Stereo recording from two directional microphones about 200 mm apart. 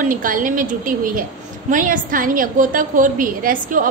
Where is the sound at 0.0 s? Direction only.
45° right (ahead or behind).